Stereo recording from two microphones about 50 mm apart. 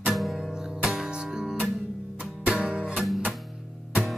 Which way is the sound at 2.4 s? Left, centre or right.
Right.